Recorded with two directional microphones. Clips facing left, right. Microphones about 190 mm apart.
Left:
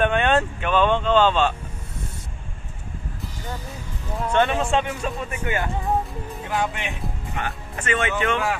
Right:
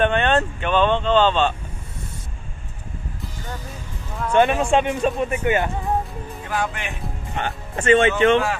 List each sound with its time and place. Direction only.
0.0 s speech: 5° left (ahead or behind)
4.3 s speech: 10° right (ahead or behind)
6.5 s speech: 20° left (ahead or behind)
7.3 s speech: 30° right (ahead or behind)